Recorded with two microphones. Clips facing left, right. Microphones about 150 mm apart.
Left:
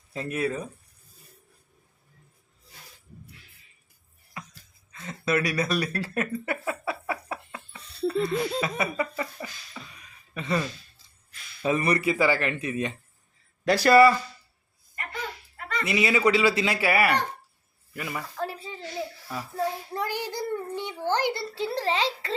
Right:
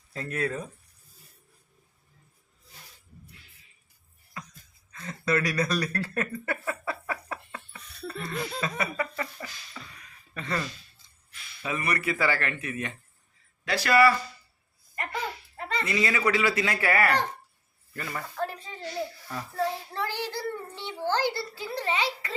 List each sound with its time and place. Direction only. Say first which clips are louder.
0.1 s speech: left 2 dB; 15° left (ahead or behind)
4.9 s speech: left 1 dB; 10° left (ahead or behind)
5.8 s a sound: left 1 dB; 15° left (ahead or behind)
7.8 s music: left 1 dB; 30° left (ahead or behind)
8.2 s speech: left 5 dB; 15° left (ahead or behind)
8.6 s chuckle: left 2 dB; 20° left (ahead or behind)
10.3 s speech: left 4 dB; 15° left (ahead or behind)
11.6 s speech: left 6 dB; 30° left (ahead or behind)
11.9 s chuckle: left 4 dB; 15° left (ahead or behind)
13.7 s speech: left 6 dB; 35° left (ahead or behind)
15.5 s a sound: left 1 dB; 25° right (ahead or behind)
15.9 s speech: left 4 dB; 15° left (ahead or behind)
18.3 s a sound: right 2 dB; 5° left (ahead or behind)
19.3 s child singing: left 1 dB; 10° left (ahead or behind); by 22.4 s 30° left (ahead or behind)